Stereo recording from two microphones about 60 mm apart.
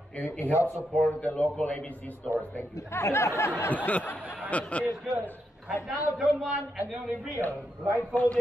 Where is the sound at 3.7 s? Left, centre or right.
Left.